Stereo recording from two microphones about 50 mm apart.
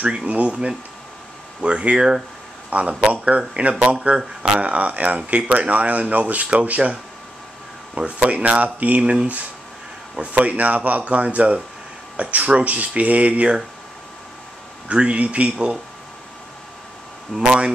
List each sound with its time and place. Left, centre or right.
0.3 s speech: right
8.0 s speech: right
14.9 s speech: right
17.5 s speech: centre